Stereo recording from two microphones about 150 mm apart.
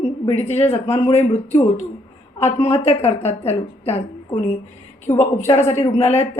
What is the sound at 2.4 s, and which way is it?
A woman's voice, 45° left (ahead or behind).